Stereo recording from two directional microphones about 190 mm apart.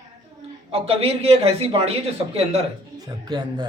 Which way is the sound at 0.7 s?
30° right (ahead or behind).